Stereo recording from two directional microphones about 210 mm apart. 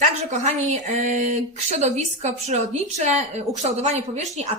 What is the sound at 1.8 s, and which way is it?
A woman's voice, 35° right (ahead or behind).